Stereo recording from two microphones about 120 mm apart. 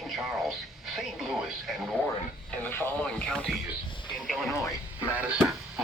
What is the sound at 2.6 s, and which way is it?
Speech, 20° left (ahead or behind).